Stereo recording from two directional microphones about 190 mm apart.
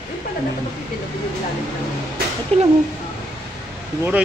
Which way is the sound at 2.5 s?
35° right (ahead or behind).